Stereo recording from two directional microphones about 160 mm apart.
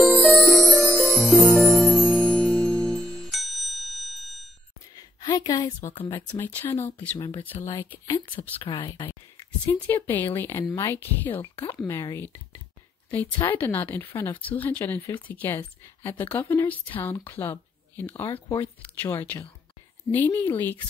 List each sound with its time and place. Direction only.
0.0 s music: centre (ahead or behind)
4.9 s gasp: 25° left (ahead or behind)
6.1 s speech: 15° left (ahead or behind)
8.6 s speech: 30° left (ahead or behind)
9.7 s speech: 10° left (ahead or behind)
13.4 s speech: 10° left (ahead or behind)